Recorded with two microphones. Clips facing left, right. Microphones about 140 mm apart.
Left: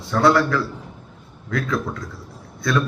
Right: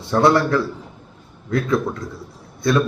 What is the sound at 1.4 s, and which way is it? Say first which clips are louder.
Speech: right 4 dB; 25° right (ahead or behind).